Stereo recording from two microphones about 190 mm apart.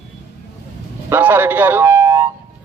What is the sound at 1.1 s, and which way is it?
Speech, 10° right (ahead or behind).